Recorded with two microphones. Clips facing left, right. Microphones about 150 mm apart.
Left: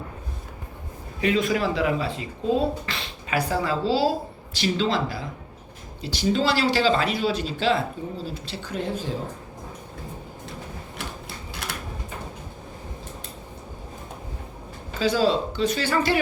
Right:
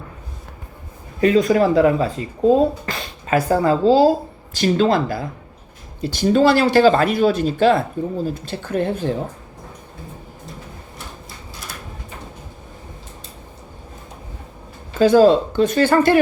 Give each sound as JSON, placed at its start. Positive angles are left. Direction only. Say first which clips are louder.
{"t": 1.2, "sound": "speech", "louder": "right 8 dB", "side_deg": -40}
{"t": 11.6, "sound": "a sound", "louder": "left 2 dB", "side_deg": 65}
{"t": 14.9, "sound": "speech", "louder": "right 10 dB", "side_deg": -50}